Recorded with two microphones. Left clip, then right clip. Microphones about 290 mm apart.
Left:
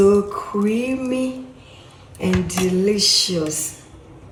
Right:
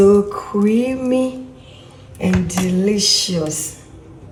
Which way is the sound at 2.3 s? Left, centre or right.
Centre.